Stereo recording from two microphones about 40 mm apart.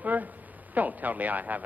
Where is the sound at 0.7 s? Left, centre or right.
Right.